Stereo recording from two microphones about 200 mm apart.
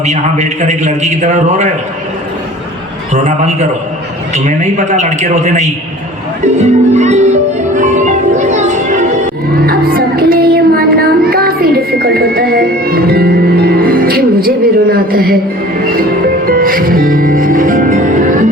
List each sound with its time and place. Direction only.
0.0 s a man's voice: 35° right (ahead or behind)
3.1 s a man's voice: 35° right (ahead or behind)
7.8 s music: 35° right (ahead or behind)
9.2 s music: 50° right (ahead or behind)
16.5 s music: 45° right (ahead or behind)